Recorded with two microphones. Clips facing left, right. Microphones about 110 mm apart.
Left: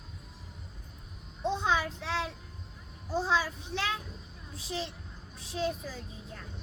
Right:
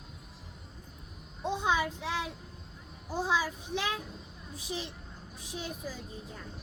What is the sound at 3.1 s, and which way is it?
A child's voice, 15° right (ahead or behind).